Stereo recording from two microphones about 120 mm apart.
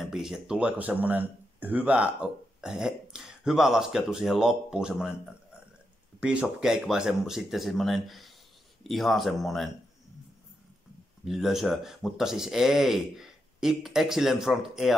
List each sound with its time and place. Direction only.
0.0 s speech: 5° right (ahead or behind)
6.2 s speech: 5° right (ahead or behind)
11.2 s speech: 5° right (ahead or behind)